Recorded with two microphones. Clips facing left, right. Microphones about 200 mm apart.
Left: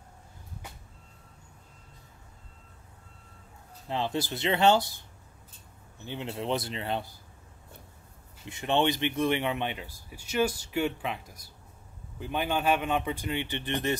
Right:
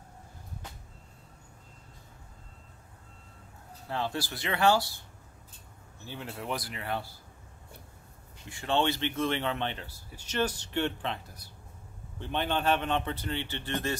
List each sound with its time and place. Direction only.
3.9 s speech: 20° left (ahead or behind)
6.0 s speech: 20° left (ahead or behind)
8.5 s speech: 20° left (ahead or behind)